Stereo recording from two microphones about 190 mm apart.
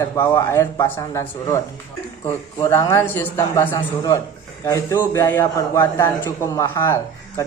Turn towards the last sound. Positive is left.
turn(degrees=15)  # may be behind; listen again after turning